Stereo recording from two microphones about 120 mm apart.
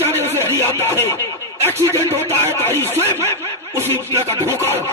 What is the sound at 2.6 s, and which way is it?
Music, 20° left (ahead or behind).